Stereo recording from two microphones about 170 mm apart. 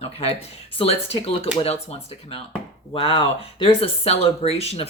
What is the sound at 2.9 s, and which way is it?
Speech, 30° left (ahead or behind).